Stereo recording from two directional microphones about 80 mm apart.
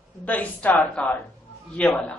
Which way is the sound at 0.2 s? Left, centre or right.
Centre.